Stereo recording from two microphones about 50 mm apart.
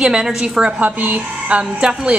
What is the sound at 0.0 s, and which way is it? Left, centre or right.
Speech, centre.